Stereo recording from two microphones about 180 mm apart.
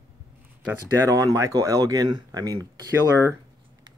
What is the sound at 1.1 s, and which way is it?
Speech, 20° right (ahead or behind).